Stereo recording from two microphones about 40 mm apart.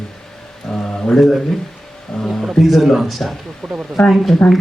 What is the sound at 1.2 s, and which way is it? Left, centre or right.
A man's voice, centre.